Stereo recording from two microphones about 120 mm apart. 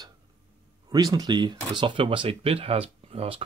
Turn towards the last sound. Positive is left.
turn(degrees=-55)  # may be behind; listen again after turning